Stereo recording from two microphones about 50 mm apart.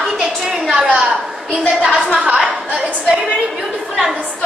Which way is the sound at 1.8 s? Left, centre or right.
Centre.